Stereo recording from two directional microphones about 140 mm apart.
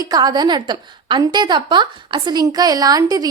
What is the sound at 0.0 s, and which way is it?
A woman's voice, 30° right (ahead or behind).